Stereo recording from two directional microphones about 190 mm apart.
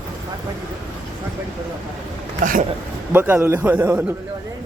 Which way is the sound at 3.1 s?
10° right (ahead or behind).